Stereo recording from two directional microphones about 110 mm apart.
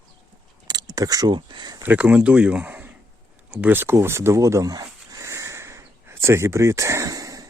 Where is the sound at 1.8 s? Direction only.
15° right (ahead or behind).